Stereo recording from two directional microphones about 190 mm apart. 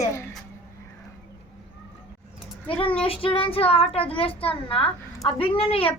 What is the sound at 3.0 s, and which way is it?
A child's voice, 30° left (ahead or behind).